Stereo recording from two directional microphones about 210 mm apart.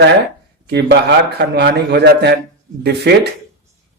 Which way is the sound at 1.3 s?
50° right (ahead or behind).